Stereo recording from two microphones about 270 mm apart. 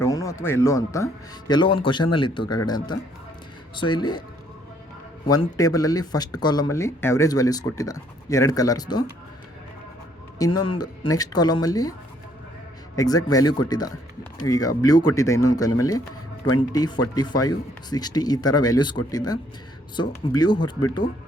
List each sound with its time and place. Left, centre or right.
0.0 s speech: centre
5.3 s speech: centre
10.3 s speech: centre
13.0 s speech: centre